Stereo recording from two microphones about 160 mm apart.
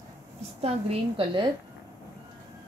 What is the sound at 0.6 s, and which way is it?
Speech, 35° right (ahead or behind).